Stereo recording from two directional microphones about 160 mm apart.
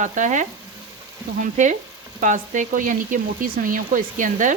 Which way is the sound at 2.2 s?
55° right (ahead or behind).